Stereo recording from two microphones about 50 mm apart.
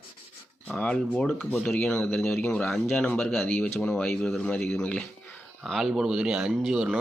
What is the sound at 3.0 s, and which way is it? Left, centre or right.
Speech, left.